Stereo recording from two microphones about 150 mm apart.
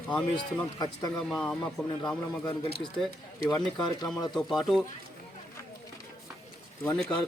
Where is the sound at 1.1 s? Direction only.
5° left (ahead or behind).